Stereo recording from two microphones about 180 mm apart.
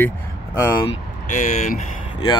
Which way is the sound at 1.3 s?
45° left (ahead or behind).